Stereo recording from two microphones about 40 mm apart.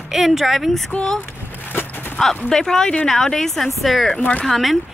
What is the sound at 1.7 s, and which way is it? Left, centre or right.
Livestock, left.